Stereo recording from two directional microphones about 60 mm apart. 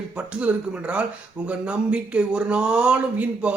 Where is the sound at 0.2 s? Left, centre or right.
Right.